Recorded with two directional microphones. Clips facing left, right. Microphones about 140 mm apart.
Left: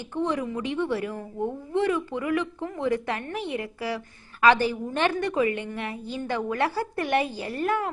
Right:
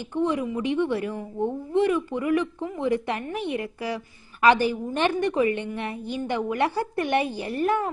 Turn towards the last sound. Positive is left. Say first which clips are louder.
# right 2 dB
turn(degrees=-20)  # may be behind; listen again after turning